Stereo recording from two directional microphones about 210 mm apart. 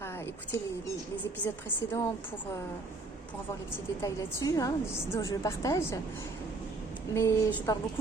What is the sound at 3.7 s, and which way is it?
A woman's voice, 15° left (ahead or behind).